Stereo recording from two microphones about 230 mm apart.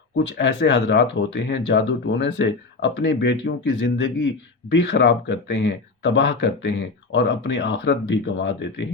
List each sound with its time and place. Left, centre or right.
0.2 s speech: left